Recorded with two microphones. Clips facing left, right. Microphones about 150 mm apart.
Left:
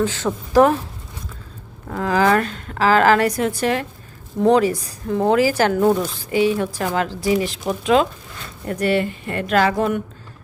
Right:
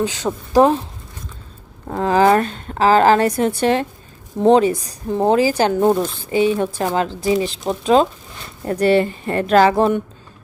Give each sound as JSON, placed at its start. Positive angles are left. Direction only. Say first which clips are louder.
{"t": 0.0, "sound": "a woman's voice", "louder": "even", "side_deg": -15}
{"t": 1.9, "sound": "a woman's voice", "louder": "right 3 dB", "side_deg": -30}